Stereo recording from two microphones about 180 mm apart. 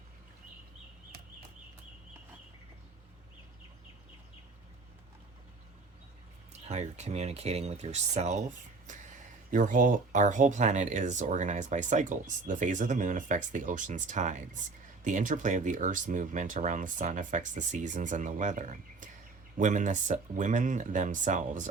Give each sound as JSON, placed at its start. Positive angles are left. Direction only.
{"t": 6.7, "sound": "speech", "side_deg": -40}
{"t": 9.5, "sound": "speech", "side_deg": -45}